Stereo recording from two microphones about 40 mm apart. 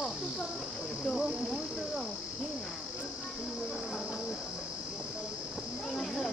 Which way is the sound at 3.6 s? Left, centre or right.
Right.